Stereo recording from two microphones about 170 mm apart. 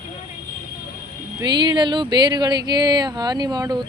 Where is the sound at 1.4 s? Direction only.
25° right (ahead or behind).